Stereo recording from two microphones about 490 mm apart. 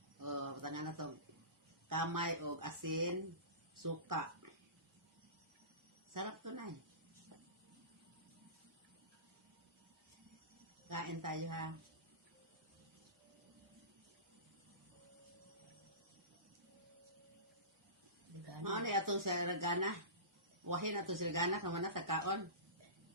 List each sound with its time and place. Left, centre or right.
0.2 s a sound: right
1.9 s speech: right
6.1 s speech: right
10.8 s speech: right
18.6 s speech: right